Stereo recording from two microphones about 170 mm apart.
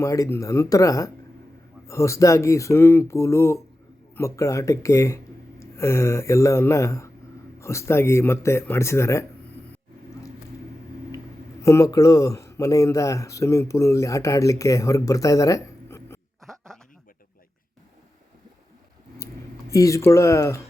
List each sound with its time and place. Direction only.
0.0 s speech: 20° left (ahead or behind)
11.6 s speech: 20° left (ahead or behind)
16.4 s a sound: centre (ahead or behind)
19.7 s speech: 20° left (ahead or behind)